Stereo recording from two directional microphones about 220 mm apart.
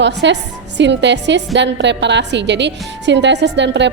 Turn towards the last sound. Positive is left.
turn(degrees=-55)  # may be behind; listen again after turning